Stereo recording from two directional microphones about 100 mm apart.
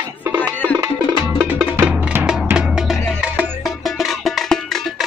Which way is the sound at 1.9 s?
20° right (ahead or behind).